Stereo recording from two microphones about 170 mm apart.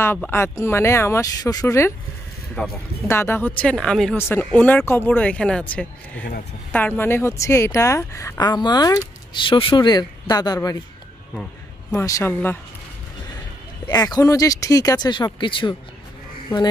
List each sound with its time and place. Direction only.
0.0 s speech: 15° left (ahead or behind)
11.9 s speech: 15° left (ahead or behind)
13.9 s speech: 20° left (ahead or behind)